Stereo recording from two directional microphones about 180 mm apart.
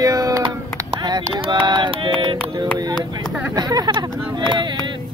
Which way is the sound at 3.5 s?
20° right (ahead or behind).